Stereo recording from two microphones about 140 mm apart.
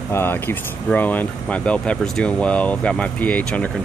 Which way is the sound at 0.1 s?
15° left (ahead or behind).